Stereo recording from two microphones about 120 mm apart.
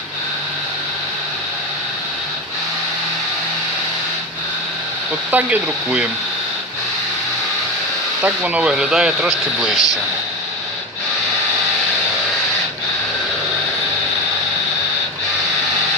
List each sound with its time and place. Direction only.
5.3 s speech: 10° right (ahead or behind)
8.2 s speech: 10° right (ahead or behind)